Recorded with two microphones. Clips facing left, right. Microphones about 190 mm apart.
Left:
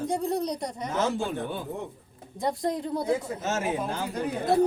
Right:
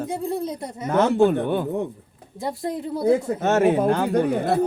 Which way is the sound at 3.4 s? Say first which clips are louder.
Right 10 dB; 60° right (ahead or behind).